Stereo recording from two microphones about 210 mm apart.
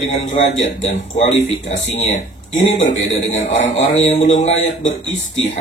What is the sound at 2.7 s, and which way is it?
Speech, 35° left (ahead or behind).